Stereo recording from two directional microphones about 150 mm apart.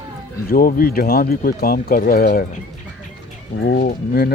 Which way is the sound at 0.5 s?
80° left.